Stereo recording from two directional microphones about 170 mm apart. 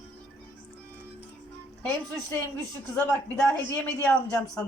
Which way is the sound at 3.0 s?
5° left (ahead or behind).